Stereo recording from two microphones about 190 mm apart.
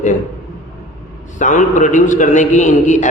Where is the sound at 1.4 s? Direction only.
40° left (ahead or behind).